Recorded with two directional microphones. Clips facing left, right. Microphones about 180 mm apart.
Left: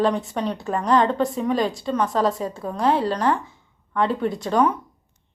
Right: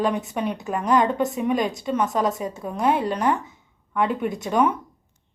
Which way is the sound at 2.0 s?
20° right (ahead or behind).